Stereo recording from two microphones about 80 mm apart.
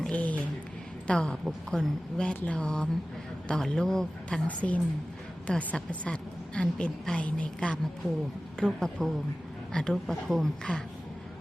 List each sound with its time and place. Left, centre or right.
0.0 s a sound: centre
1.0 s a woman's voice: centre
1.5 s speech: centre
2.1 s a woman's voice: centre
4.4 s a woman's voice: centre